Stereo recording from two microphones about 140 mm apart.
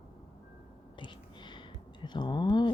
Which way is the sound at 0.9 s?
35° left (ahead or behind).